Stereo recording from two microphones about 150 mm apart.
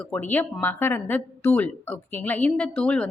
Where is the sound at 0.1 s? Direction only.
10° left (ahead or behind).